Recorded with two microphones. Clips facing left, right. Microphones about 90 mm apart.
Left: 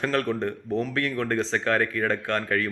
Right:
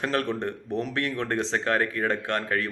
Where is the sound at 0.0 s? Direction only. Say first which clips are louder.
Left 2 dB; 20° right (ahead or behind).